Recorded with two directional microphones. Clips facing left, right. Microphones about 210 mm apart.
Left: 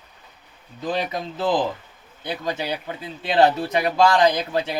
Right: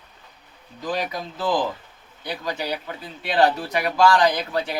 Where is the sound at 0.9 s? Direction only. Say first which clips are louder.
Left 2 dB; 25° left (ahead or behind).